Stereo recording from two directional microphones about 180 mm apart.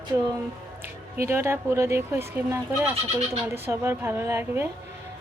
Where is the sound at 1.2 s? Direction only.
15° right (ahead or behind).